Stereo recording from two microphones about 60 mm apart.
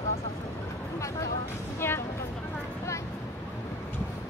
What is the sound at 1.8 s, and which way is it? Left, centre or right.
Speech, left.